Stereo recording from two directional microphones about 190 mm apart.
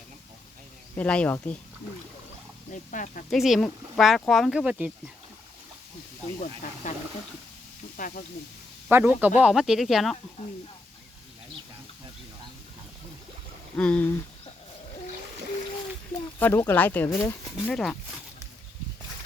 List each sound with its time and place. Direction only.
0.9 s speech: 5° left (ahead or behind)
2.7 s speech: 40° left (ahead or behind)
3.2 s speech: centre (ahead or behind)
6.8 s speech: 40° left (ahead or behind)
8.9 s a man's voice: 10° right (ahead or behind)
13.7 s speech: 5° left (ahead or behind)
16.4 s speech: 10° left (ahead or behind)